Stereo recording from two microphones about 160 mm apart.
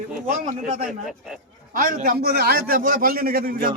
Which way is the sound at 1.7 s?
65° right (ahead or behind).